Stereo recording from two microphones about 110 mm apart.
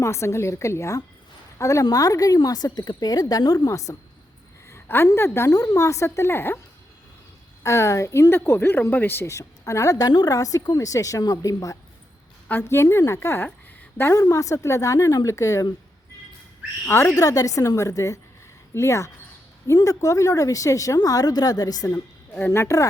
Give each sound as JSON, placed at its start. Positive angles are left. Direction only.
{"t": 0.0, "sound": "a woman's voice", "side_deg": 25}
{"t": 4.7, "sound": "a sound", "side_deg": 20}
{"t": 5.1, "sound": "speech", "side_deg": 25}
{"t": 7.6, "sound": "speech", "side_deg": 25}
{"t": 16.8, "sound": "a woman's voice", "side_deg": 25}
{"t": 21.8, "sound": "a woman's voice", "side_deg": 20}